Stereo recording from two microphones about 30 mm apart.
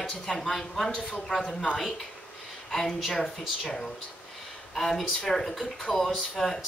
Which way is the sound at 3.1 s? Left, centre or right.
Centre.